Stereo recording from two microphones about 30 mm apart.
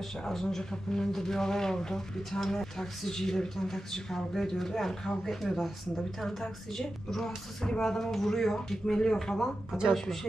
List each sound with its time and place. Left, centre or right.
0.2 s speech: centre